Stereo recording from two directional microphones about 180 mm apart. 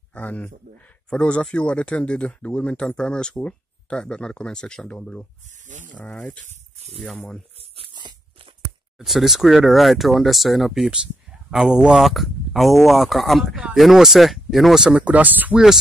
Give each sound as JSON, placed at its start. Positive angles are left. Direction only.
{"t": 0.1, "sound": "speech", "side_deg": 10}
{"t": 5.7, "sound": "speech", "side_deg": -45}
{"t": 5.9, "sound": "speech", "side_deg": 5}
{"t": 6.4, "sound": "snake", "side_deg": -35}
{"t": 7.0, "sound": "speech", "side_deg": 5}
{"t": 7.7, "sound": "dog", "side_deg": -30}
{"t": 8.6, "sound": "speech", "side_deg": 0}